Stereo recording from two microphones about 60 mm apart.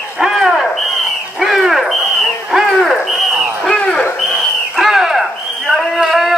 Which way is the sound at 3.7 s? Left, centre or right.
Centre.